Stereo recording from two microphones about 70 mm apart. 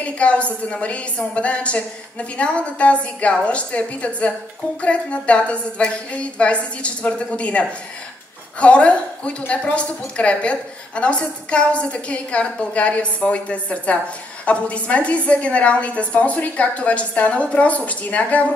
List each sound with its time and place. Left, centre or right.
0.0 s a woman's voice: centre